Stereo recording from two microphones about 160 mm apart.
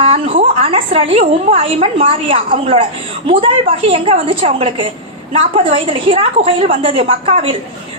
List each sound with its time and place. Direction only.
0.0 s a woman's voice: 35° right (ahead or behind)